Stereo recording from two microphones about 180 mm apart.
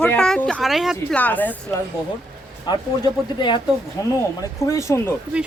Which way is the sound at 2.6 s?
25° left (ahead or behind).